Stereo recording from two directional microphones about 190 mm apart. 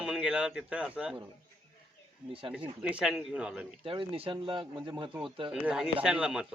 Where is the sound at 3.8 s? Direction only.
30° right (ahead or behind).